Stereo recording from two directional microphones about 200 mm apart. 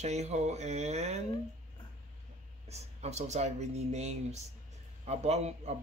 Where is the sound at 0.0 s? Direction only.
35° right (ahead or behind).